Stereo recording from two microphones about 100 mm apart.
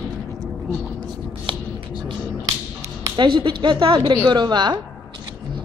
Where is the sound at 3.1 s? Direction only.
55° right (ahead or behind).